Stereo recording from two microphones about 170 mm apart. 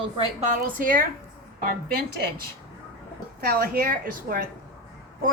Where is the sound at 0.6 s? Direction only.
55° right (ahead or behind).